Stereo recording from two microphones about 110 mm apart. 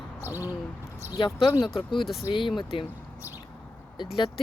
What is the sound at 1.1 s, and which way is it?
Speech, 45° left (ahead or behind).